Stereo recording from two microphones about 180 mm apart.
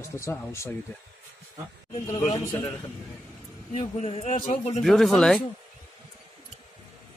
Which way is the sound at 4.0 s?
35° left (ahead or behind).